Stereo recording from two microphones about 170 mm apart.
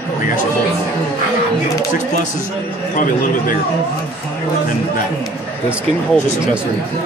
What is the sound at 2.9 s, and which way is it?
Speech, 55° left (ahead or behind).